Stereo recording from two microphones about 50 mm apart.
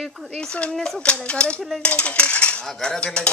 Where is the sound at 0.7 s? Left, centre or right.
Centre.